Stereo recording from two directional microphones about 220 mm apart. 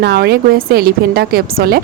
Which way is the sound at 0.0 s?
45° right (ahead or behind).